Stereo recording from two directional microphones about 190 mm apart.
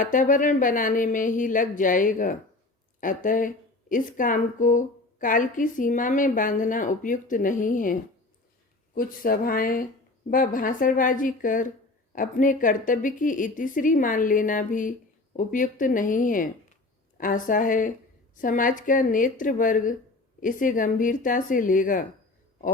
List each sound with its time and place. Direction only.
0.0 s speech: 45° left (ahead or behind)
9.0 s speech: 50° left (ahead or behind)